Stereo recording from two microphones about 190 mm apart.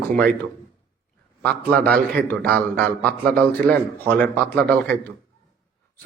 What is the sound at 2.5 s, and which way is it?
A man's voice, 10° left (ahead or behind).